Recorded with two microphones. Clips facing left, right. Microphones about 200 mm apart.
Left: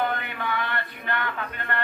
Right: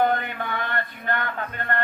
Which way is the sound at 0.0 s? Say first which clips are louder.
Right 5 dB; 45° right (ahead or behind).